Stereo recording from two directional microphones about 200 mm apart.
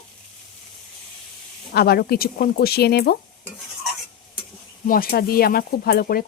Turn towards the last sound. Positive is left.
turn(degrees=50)  # may be behind; listen again after turning